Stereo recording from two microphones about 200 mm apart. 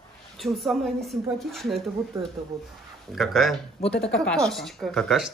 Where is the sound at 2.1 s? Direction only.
15° right (ahead or behind).